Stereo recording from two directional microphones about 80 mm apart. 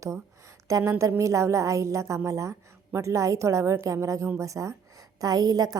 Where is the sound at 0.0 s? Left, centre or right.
Right.